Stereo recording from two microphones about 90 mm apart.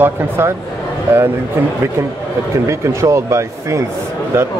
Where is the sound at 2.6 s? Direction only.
35° right (ahead or behind).